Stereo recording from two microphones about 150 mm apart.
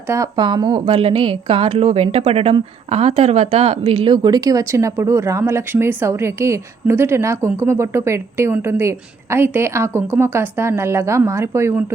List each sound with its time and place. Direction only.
0.1 s a woman's voice: 25° right (ahead or behind)